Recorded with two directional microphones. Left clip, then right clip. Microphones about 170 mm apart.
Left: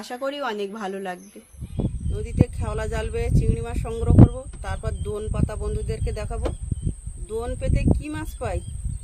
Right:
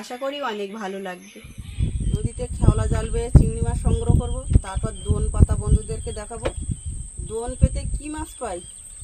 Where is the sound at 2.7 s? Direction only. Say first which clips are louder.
Even; 10° left (ahead or behind).